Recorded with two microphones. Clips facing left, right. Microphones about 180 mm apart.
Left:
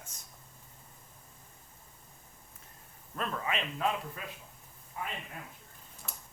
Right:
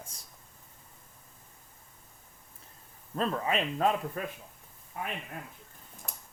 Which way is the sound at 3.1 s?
30° right (ahead or behind).